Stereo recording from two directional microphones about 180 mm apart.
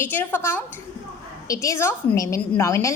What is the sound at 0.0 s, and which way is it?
A woman's voice, 10° left (ahead or behind).